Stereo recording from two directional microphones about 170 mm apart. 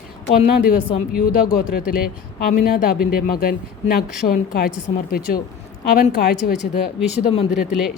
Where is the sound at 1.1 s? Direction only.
60° left (ahead or behind).